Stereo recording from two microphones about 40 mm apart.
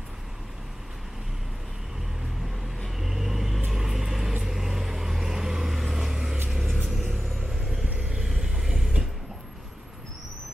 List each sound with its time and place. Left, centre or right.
3.0 s vehicle: centre
6.5 s music: centre
7.3 s vehicle: centre
7.8 s vehicle: right
8.2 s mechanisms: centre